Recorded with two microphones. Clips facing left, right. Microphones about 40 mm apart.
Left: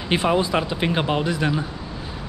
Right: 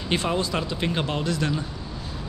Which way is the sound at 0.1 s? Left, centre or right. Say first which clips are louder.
Left 5 dB; centre.